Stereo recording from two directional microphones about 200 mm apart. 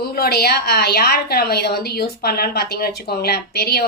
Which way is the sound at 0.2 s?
50° left (ahead or behind).